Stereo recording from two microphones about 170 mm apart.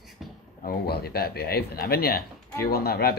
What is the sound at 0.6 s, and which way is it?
Speech, 65° left (ahead or behind).